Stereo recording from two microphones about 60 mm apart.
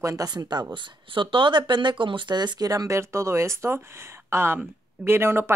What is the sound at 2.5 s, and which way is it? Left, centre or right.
Speech, right.